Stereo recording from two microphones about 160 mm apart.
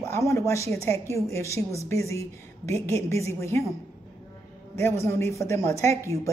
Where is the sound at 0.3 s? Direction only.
20° left (ahead or behind).